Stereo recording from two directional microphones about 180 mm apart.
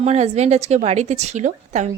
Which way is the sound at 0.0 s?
35° right (ahead or behind).